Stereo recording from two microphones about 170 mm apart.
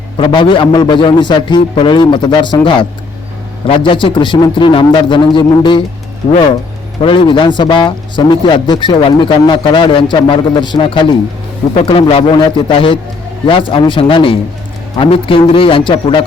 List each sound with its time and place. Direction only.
0.2 s a man's voice: 30° left (ahead or behind)
3.7 s a man's voice: 30° left (ahead or behind)
7.0 s a man's voice: 30° left (ahead or behind)